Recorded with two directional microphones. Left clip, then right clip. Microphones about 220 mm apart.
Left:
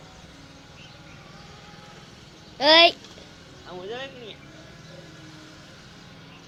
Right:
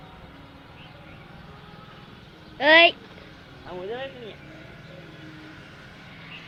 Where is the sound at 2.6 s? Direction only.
15° left (ahead or behind).